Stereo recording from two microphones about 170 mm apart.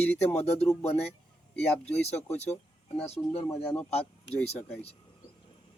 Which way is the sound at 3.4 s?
5° left (ahead or behind).